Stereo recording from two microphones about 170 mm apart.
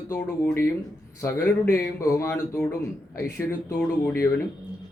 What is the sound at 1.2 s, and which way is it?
A man's voice, 15° left (ahead or behind).